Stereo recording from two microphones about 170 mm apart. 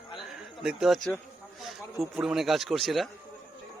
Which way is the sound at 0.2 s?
Centre (ahead or behind).